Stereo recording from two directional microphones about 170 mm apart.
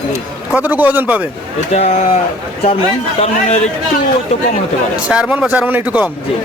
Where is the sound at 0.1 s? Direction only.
10° right (ahead or behind).